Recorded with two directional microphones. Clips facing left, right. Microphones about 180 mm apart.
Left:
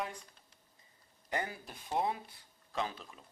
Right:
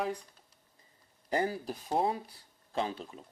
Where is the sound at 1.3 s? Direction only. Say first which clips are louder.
Right 7 dB; 35° right (ahead or behind).